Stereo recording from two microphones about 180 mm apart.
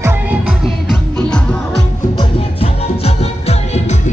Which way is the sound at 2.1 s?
30° left (ahead or behind).